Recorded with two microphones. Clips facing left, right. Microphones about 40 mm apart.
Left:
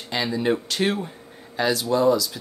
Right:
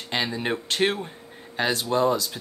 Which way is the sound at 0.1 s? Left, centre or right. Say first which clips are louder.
Left 3 dB; right.